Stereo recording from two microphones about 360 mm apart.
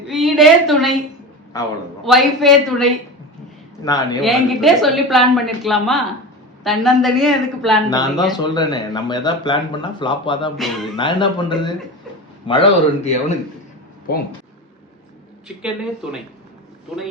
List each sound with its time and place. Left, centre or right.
0.1 s a woman's voice: centre
7.9 s speech: centre